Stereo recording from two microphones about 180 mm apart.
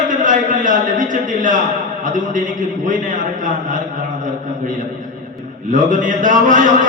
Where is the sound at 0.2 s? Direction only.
45° right (ahead or behind).